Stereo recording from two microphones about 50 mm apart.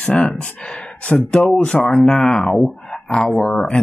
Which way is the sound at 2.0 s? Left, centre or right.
Centre.